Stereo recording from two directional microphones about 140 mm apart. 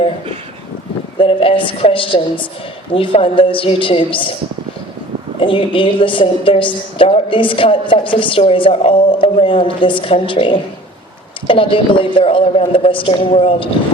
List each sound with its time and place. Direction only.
1.2 s a woman's voice: 40° left (ahead or behind)
5.4 s a woman's voice: 40° left (ahead or behind)